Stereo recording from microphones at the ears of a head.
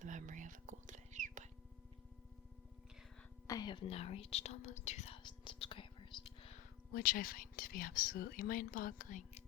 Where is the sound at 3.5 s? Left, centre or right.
Left.